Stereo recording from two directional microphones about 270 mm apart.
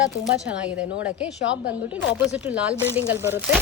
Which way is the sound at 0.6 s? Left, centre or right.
Centre.